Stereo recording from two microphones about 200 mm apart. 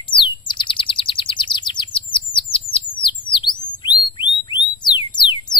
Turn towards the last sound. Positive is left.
turn(degrees=25)  # may be behind; listen again after turning